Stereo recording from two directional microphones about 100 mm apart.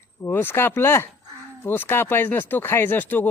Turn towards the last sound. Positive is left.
turn(degrees=20)  # may be behind; listen again after turning